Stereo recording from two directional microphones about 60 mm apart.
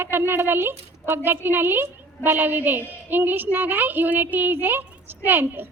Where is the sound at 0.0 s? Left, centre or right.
Right.